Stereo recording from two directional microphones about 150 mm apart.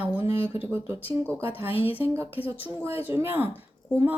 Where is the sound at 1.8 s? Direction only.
15° right (ahead or behind).